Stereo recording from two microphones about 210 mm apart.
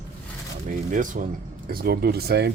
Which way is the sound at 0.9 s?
40° right (ahead or behind).